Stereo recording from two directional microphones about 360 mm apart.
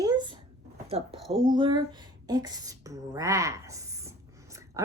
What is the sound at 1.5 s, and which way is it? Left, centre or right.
Speech, centre.